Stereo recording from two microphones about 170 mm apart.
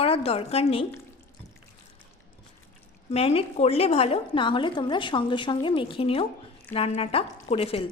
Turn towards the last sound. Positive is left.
turn(degrees=35)  # may be behind; listen again after turning